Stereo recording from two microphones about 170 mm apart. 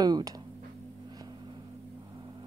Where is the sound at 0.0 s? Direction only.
25° right (ahead or behind).